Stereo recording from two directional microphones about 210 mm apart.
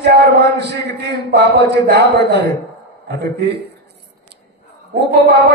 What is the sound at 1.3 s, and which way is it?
A man's voice, 50° right (ahead or behind).